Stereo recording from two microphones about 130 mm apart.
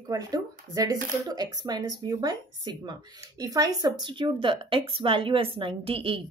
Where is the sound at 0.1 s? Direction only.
30° right (ahead or behind).